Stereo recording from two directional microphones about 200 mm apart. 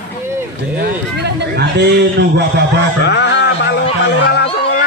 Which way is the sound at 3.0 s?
60° left (ahead or behind).